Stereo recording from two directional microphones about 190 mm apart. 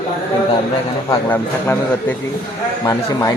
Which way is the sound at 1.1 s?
10° left (ahead or behind).